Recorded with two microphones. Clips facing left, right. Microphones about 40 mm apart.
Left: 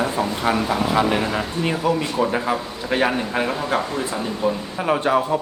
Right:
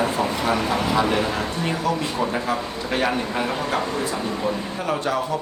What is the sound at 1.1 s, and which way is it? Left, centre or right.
A man's voice, centre.